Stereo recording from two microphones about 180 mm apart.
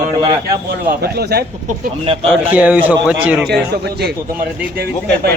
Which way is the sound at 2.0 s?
30° right (ahead or behind).